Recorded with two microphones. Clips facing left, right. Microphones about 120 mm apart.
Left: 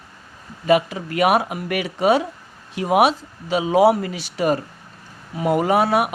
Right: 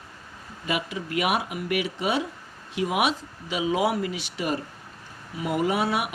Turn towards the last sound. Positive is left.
turn(degrees=45)  # may be behind; listen again after turning